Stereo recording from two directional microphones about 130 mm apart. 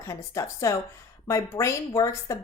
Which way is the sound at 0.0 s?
25° left (ahead or behind).